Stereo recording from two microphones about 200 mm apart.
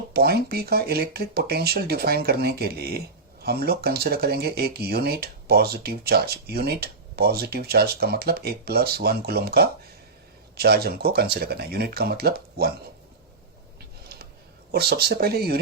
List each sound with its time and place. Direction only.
0.1 s speech: 50° right (ahead or behind)
14.7 s speech: 50° right (ahead or behind)